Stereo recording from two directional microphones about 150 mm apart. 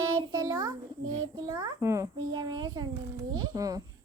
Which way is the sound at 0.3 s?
25° right (ahead or behind).